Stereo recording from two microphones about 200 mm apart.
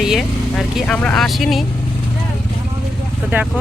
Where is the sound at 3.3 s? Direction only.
10° right (ahead or behind).